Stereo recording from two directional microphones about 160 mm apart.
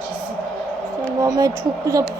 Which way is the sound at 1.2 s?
20° right (ahead or behind).